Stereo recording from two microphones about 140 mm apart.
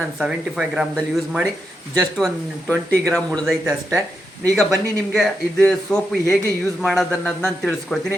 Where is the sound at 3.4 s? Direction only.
20° right (ahead or behind).